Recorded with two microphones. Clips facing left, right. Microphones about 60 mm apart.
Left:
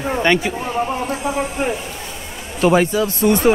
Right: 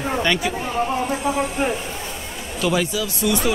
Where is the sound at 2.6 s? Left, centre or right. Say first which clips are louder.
Left 7 dB; left.